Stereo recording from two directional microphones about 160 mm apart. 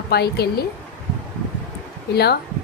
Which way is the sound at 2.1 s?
90° left.